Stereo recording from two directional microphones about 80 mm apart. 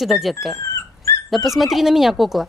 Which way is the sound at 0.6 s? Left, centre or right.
Left.